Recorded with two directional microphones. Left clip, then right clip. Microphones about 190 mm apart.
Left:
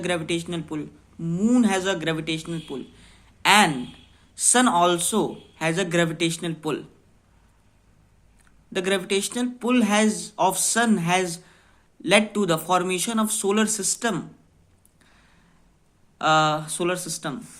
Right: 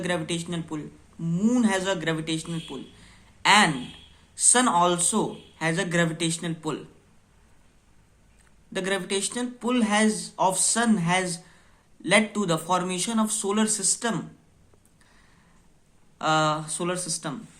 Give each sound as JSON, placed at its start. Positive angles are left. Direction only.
{"t": 0.0, "sound": "speech", "side_deg": 20}
{"t": 8.7, "sound": "speech", "side_deg": 20}
{"t": 16.1, "sound": "speech", "side_deg": 20}